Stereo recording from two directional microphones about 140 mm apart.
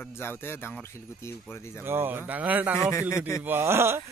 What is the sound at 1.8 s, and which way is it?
Speech, 15° right (ahead or behind).